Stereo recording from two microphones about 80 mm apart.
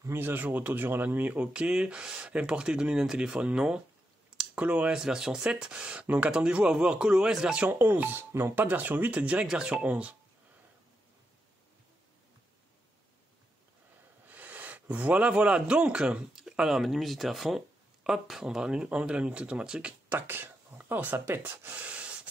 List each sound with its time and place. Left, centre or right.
0.0 s speech: right
8.5 s speech: right
14.2 s speech: right
20.1 s speech: right